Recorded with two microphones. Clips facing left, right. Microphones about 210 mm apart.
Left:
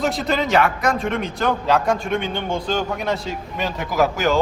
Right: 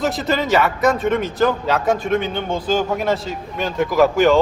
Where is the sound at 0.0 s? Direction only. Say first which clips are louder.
Right 1 dB; centre (ahead or behind).